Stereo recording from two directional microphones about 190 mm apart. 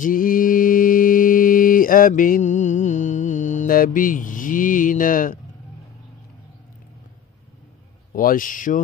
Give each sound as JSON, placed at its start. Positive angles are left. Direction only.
{"t": 0.0, "sound": "mantra", "side_deg": 45}
{"t": 8.1, "sound": "a man's voice", "side_deg": 45}